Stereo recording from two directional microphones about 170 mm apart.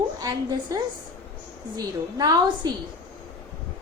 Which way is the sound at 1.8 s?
25° right (ahead or behind).